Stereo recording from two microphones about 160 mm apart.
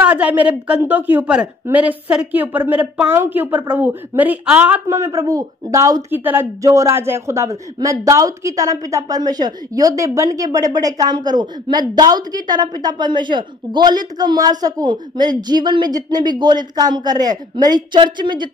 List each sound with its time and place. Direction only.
0.0 s a woman's voice: 10° right (ahead or behind)
4.9 s a man's voice: 20° right (ahead or behind)